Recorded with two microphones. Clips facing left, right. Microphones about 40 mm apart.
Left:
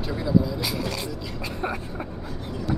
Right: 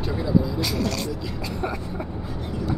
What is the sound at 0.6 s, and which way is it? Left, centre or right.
Speech, centre.